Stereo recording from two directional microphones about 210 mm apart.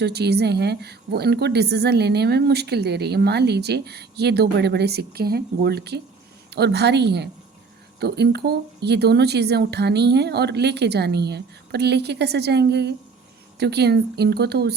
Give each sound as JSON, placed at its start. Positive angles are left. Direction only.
{"t": 0.0, "sound": "a woman's voice", "side_deg": -50}